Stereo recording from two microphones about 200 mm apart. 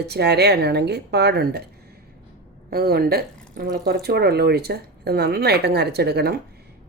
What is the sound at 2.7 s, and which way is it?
Speech, 50° right (ahead or behind).